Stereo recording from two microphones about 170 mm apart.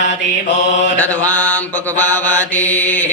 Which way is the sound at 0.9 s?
10° left (ahead or behind).